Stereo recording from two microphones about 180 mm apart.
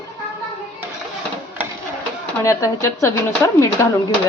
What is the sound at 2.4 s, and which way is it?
Speech, 15° left (ahead or behind).